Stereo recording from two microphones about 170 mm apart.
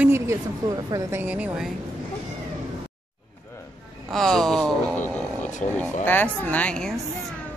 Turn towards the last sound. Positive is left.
turn(degrees=5)  # may be behind; listen again after turning